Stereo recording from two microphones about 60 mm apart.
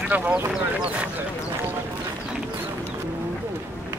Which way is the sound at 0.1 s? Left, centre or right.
Right.